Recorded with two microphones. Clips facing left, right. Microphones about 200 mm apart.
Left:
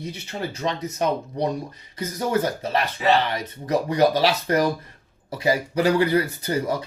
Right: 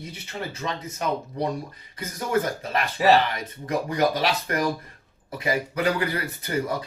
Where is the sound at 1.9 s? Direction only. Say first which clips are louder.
Left 2 dB; 30° left (ahead or behind).